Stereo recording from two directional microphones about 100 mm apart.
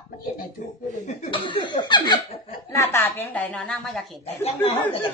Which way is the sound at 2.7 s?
25° left (ahead or behind).